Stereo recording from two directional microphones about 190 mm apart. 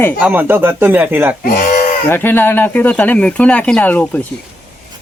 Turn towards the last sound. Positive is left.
turn(degrees=10)  # may be behind; listen again after turning